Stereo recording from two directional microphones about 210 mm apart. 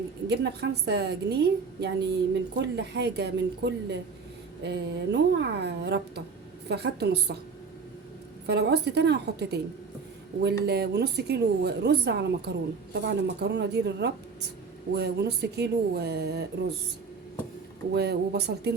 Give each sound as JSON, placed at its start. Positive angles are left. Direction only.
{"t": 0.3, "sound": "speech", "side_deg": -55}
{"t": 8.4, "sound": "speech", "side_deg": -55}
{"t": 17.9, "sound": "speech", "side_deg": -50}